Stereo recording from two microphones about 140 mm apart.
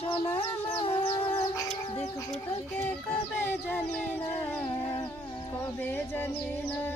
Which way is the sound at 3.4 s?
15° left (ahead or behind).